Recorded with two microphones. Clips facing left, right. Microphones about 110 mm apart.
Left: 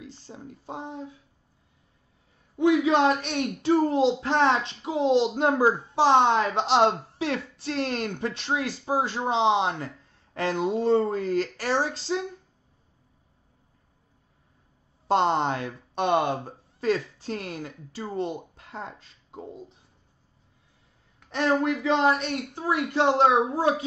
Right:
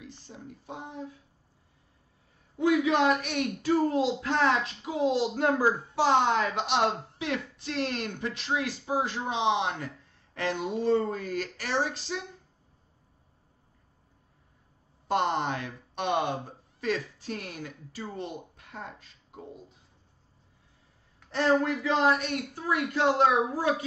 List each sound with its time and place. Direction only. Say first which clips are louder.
0.0 s speech: left 3 dB; 30° left (ahead or behind)
2.5 s speech: left 4 dB; 30° left (ahead or behind)
15.0 s speech: left 5 dB; 30° left (ahead or behind)
16.1 s speech: left 4 dB; 45° left (ahead or behind)
16.8 s speech: left 5 dB; 30° left (ahead or behind)
21.8 s speech: left 2 dB; 30° left (ahead or behind)